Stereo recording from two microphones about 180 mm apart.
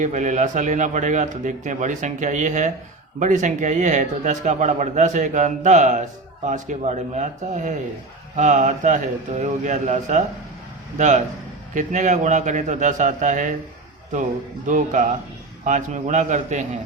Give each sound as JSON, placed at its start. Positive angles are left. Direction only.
{"t": 0.0, "sound": "a man's voice", "side_deg": -45}
{"t": 14.7, "sound": "a man's voice", "side_deg": -45}